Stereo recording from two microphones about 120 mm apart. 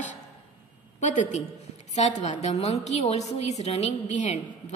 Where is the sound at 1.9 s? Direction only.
75° left (ahead or behind).